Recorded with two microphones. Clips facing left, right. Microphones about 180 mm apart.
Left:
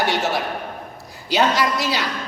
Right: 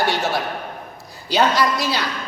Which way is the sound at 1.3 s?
20° left (ahead or behind).